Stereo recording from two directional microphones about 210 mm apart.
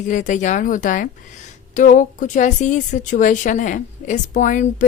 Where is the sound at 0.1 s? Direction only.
35° left (ahead or behind).